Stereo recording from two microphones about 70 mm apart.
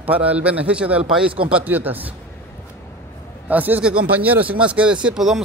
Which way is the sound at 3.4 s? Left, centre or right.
Right.